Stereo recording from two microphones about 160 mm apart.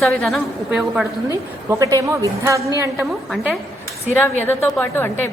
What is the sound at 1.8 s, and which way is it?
A woman's voice, 20° right (ahead or behind).